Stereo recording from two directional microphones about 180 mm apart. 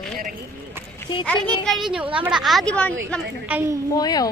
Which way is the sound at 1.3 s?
5° left (ahead or behind).